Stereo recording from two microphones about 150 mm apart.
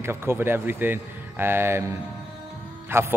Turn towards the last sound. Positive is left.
turn(degrees=-15)  # may be behind; listen again after turning